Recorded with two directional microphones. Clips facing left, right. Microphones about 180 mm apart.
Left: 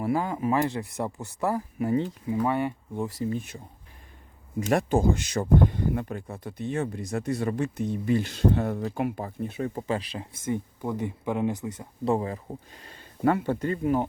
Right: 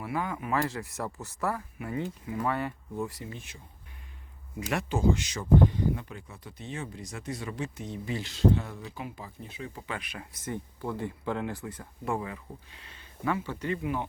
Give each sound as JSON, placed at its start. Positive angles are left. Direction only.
{"t": 0.0, "sound": "speech", "side_deg": 30}
{"t": 1.5, "sound": "speech", "side_deg": 30}
{"t": 3.2, "sound": "speech", "side_deg": 40}
{"t": 4.7, "sound": "speech", "side_deg": 50}
{"t": 12.0, "sound": "speech", "side_deg": 35}